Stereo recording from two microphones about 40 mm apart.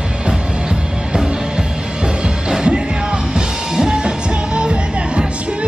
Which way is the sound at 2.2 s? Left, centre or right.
Right.